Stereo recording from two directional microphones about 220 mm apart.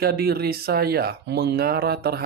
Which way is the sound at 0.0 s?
45° right (ahead or behind).